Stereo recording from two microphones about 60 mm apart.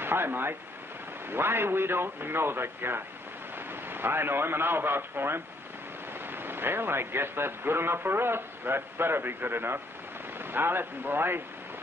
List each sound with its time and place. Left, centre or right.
0.0 s a man's voice: right